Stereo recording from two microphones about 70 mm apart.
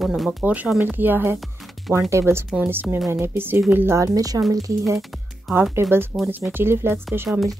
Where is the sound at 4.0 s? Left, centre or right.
Right.